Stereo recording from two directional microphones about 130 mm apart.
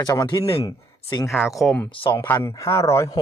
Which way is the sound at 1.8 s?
40° left (ahead or behind).